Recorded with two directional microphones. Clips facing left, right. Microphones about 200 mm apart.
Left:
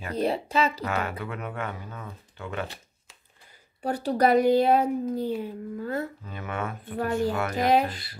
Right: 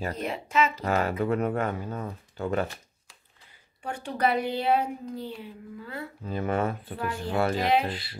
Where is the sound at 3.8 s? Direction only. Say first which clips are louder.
Left 5 dB; 35° left (ahead or behind).